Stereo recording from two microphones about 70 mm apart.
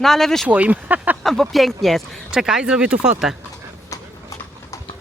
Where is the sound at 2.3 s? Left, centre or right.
Centre.